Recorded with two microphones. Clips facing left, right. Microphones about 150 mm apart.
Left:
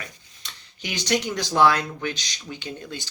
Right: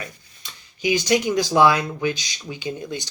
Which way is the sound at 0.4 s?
10° right (ahead or behind).